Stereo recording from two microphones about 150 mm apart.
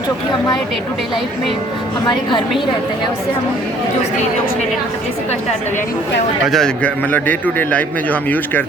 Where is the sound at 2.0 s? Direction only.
30° left (ahead or behind).